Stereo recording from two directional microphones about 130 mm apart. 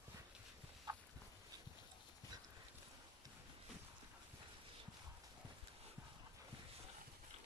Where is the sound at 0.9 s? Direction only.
30° right (ahead or behind).